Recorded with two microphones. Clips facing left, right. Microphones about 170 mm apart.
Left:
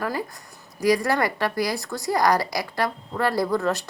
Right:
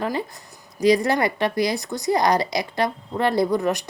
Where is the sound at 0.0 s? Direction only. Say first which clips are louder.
Right 2 dB; 20° right (ahead or behind).